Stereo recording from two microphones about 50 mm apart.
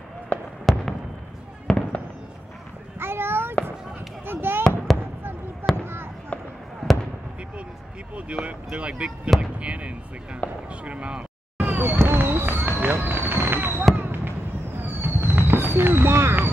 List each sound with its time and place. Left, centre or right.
0.3 s fireworks: left
0.7 s fireworks: centre
3.0 s a sound: right
4.3 s fireworks: right
4.9 s fireworks: centre
5.8 s fireworks: right
6.3 s fireworks: left
8.3 s speech: right
10.4 s speech: left
10.9 s speech: right
11.6 s fireworks: right
12.0 s fireworks: right